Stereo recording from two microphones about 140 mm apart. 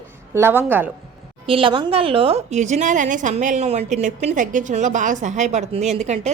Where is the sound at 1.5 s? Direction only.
40° right (ahead or behind).